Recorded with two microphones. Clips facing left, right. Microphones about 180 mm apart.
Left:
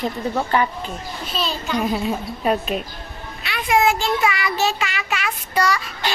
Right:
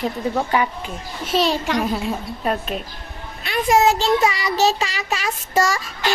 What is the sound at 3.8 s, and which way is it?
A child's voice, 35° right (ahead or behind).